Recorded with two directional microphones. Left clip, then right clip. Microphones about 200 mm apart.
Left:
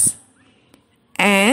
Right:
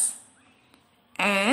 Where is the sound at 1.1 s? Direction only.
30° left (ahead or behind).